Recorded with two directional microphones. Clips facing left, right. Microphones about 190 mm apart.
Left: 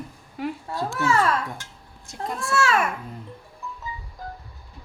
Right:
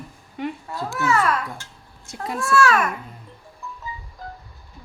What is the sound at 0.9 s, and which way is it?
Speech, 30° left (ahead or behind).